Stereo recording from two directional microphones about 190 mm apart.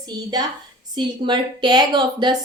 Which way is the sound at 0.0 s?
20° right (ahead or behind).